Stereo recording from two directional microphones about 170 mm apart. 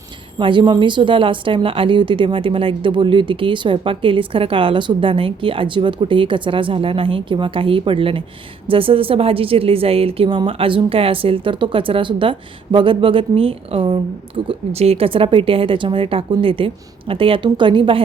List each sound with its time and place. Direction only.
0.3 s a woman's voice: 30° right (ahead or behind)